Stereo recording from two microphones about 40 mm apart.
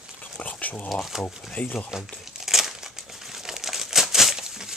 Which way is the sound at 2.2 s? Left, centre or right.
Centre.